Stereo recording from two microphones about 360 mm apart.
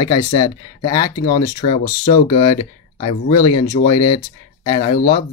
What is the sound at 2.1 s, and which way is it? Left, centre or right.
Speech, centre.